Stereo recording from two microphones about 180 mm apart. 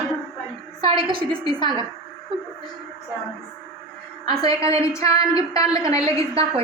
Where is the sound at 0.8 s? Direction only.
30° right (ahead or behind).